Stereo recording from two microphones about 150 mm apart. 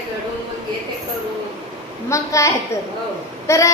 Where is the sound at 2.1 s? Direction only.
20° left (ahead or behind).